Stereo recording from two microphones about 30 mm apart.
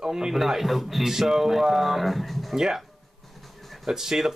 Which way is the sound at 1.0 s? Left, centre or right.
Centre.